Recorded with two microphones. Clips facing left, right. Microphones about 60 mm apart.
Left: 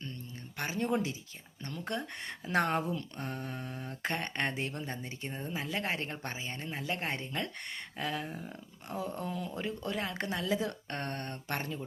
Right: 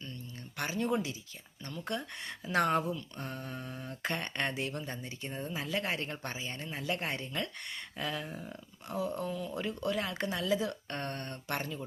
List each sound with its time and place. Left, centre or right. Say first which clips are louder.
0.6 s speech: even; left
2.6 s speech: right 1 dB; left
3.2 s speech: left 2 dB; left
8.3 s speech: even; centre
9.0 s speech: right 2 dB; left